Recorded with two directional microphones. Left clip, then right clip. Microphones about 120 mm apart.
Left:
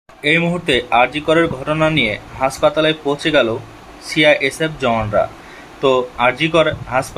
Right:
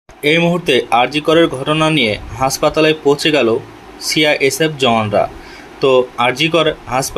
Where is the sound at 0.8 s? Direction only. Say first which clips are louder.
Right 1 dB; 35° right (ahead or behind).